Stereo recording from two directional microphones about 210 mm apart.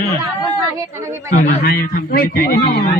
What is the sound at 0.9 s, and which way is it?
Speech, 15° right (ahead or behind).